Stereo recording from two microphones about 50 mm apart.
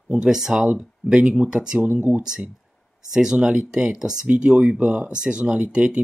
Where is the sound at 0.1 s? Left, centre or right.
Centre.